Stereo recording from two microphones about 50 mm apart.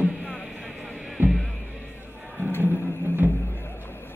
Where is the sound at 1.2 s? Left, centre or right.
Right.